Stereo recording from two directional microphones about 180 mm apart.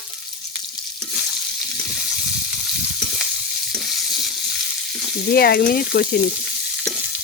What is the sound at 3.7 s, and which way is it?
Frying, centre (ahead or behind).